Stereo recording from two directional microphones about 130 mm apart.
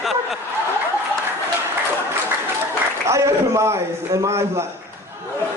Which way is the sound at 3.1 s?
25° right (ahead or behind).